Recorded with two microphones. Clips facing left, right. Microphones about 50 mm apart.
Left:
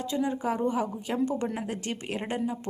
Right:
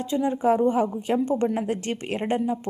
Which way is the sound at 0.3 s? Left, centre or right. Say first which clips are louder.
Right 7 dB; right.